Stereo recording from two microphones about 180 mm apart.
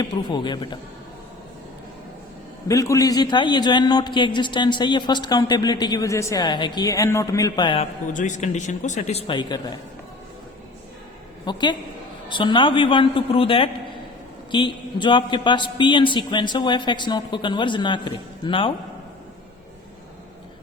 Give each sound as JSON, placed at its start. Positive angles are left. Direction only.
{"t": 0.0, "sound": "a man's voice", "side_deg": 25}
{"t": 2.6, "sound": "a man's voice", "side_deg": 15}
{"t": 8.1, "sound": "a man's voice", "side_deg": 45}
{"t": 11.4, "sound": "a man's voice", "side_deg": 25}